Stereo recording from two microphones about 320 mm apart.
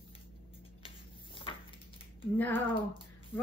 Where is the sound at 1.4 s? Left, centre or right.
Centre.